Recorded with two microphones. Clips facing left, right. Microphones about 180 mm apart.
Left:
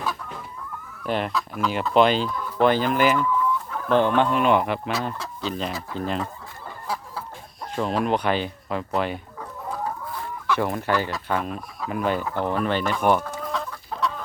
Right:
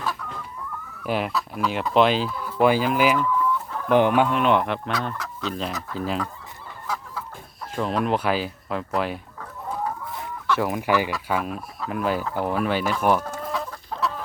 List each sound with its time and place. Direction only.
1.0 s speech: 5° right (ahead or behind)
5.1 s chicken: 30° left (ahead or behind)
5.5 s speech: centre (ahead or behind)
6.8 s chicken: 30° left (ahead or behind)
7.8 s speech: centre (ahead or behind)
10.4 s speech: centre (ahead or behind)